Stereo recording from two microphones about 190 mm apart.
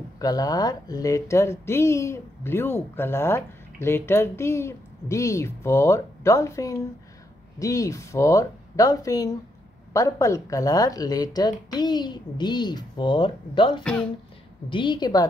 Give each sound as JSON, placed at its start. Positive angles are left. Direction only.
{"t": 0.2, "sound": "a woman's voice", "side_deg": 20}